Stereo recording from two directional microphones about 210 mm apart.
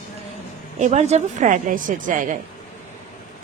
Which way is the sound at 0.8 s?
30° right (ahead or behind).